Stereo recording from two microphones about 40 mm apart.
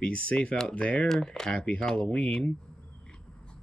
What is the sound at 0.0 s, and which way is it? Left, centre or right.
Speech, left.